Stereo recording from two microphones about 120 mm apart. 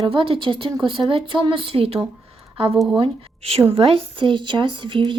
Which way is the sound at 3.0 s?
55° right (ahead or behind).